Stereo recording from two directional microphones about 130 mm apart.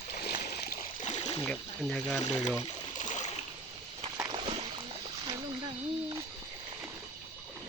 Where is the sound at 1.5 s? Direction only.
5° left (ahead or behind).